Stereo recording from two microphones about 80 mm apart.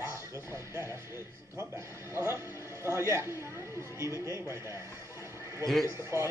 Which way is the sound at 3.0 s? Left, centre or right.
Right.